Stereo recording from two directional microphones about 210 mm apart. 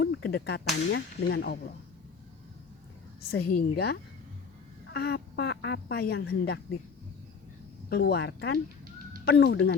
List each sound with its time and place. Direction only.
0.0 s whip: 50° left (ahead or behind)
0.9 s speech: 50° left (ahead or behind)
3.2 s speech: 50° left (ahead or behind)
4.9 s speech: 50° left (ahead or behind)
7.9 s speech: 50° left (ahead or behind)